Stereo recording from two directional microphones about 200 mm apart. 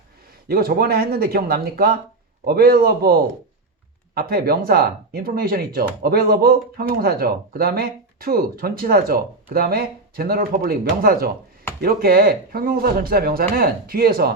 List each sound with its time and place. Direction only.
0.4 s speech: 50° right (ahead or behind)